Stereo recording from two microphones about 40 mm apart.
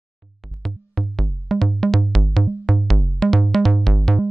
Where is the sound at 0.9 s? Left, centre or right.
Centre.